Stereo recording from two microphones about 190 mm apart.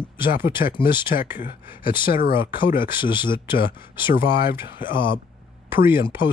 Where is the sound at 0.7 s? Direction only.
25° left (ahead or behind).